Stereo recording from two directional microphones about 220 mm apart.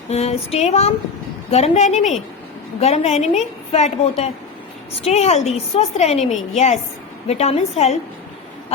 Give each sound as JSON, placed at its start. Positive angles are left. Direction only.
{"t": 0.1, "sound": "a woman's voice", "side_deg": 30}